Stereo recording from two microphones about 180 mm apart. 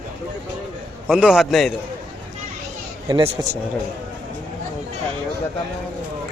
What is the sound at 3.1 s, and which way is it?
Speech, 30° right (ahead or behind).